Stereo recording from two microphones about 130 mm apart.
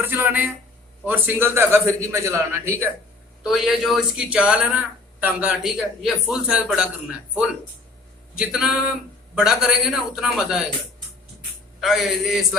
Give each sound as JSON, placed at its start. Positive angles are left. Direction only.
{"t": 0.0, "sound": "a man's voice", "side_deg": -15}
{"t": 3.4, "sound": "a man's voice", "side_deg": 0}
{"t": 11.8, "sound": "a man's voice", "side_deg": 0}